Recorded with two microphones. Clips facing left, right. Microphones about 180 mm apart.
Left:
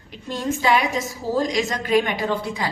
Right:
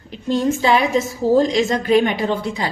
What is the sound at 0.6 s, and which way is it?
A woman's voice, 25° right (ahead or behind).